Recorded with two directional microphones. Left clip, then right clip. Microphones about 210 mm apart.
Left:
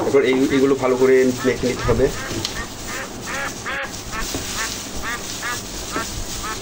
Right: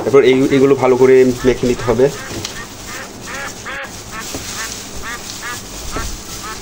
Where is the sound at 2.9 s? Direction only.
Centre (ahead or behind).